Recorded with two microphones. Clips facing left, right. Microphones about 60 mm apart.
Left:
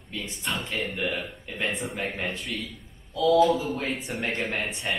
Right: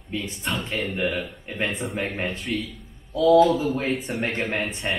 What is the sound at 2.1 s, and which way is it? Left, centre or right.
Speech, right.